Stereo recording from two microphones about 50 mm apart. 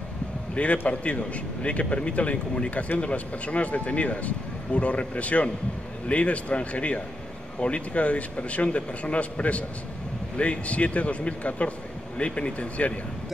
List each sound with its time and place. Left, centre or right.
0.6 s speech: left